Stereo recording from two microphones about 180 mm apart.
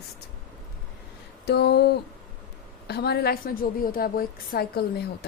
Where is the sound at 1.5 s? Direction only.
65° left (ahead or behind).